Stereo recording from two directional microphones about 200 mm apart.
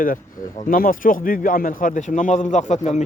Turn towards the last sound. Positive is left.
turn(degrees=35)  # may be behind; listen again after turning